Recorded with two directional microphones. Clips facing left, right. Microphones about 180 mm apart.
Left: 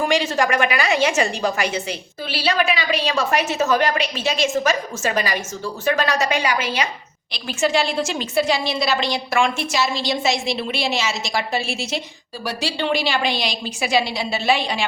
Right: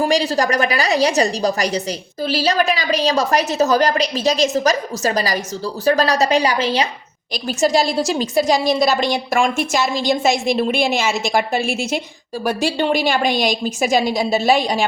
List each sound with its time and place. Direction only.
0.0 s a woman's voice: 35° right (ahead or behind)